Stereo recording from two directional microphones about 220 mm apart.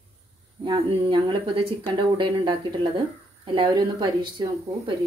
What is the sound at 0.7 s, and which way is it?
Speech, 20° right (ahead or behind).